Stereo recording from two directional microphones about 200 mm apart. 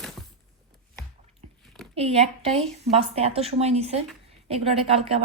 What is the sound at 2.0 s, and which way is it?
A woman's voice, 30° right (ahead or behind).